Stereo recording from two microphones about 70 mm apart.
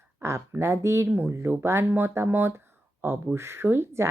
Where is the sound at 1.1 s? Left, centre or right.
Right.